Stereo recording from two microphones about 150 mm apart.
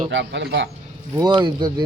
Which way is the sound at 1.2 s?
30° right (ahead or behind).